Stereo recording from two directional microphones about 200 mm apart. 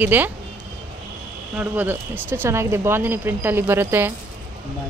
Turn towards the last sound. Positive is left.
turn(degrees=-10)  # may be behind; listen again after turning